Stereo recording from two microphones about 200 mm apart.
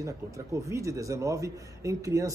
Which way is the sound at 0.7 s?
15° right (ahead or behind).